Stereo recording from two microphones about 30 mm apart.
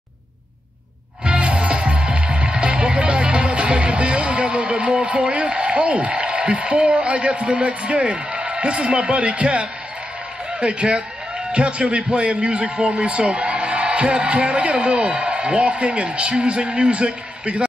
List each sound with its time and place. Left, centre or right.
1.2 s music: right
10.6 s a man's voice: right